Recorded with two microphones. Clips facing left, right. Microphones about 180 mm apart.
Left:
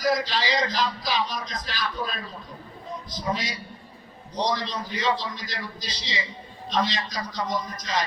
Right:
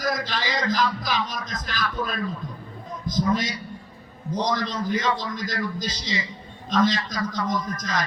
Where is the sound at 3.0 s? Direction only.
50° right (ahead or behind).